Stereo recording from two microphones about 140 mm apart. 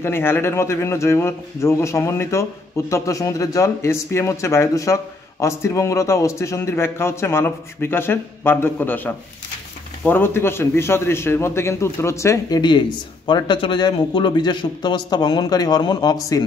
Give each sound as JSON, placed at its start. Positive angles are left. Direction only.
{"t": 0.0, "sound": "speech", "side_deg": 15}